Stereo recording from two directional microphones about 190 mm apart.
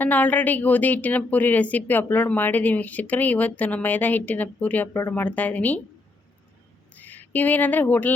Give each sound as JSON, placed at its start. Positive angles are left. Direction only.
{"t": 0.0, "sound": "speech", "side_deg": 10}
{"t": 7.0, "sound": "speech", "side_deg": 10}